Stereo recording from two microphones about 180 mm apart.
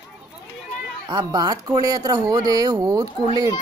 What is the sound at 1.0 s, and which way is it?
Speech, 20° right (ahead or behind).